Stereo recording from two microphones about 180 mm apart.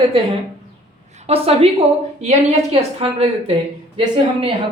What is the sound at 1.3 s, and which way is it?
A woman's voice, 35° right (ahead or behind).